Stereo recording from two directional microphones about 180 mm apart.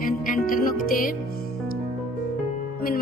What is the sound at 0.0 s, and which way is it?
Music, 50° left (ahead or behind).